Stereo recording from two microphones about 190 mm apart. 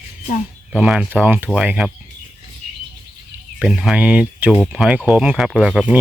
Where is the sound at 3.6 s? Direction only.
5° right (ahead or behind).